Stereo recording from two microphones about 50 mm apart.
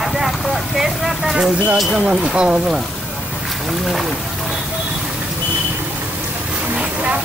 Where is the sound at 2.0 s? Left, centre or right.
Right.